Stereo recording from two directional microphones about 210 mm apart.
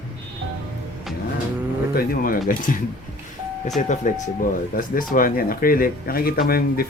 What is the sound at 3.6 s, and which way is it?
Speech, 35° left (ahead or behind).